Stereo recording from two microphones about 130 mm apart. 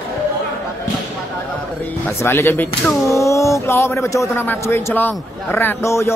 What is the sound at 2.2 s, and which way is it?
A man's voice, 20° left (ahead or behind).